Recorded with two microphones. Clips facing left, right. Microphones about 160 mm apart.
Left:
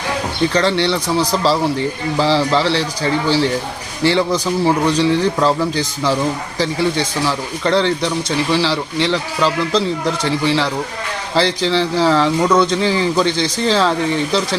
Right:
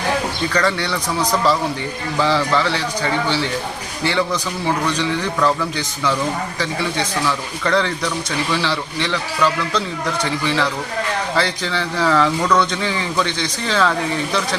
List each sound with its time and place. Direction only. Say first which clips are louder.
0.5 s speech: left 3 dB; 25° left (ahead or behind)